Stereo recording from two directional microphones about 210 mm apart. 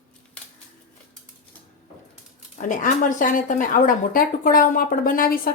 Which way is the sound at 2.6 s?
40° left (ahead or behind).